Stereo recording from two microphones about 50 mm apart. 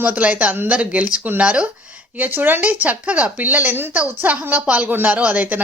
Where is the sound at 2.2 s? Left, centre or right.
Right.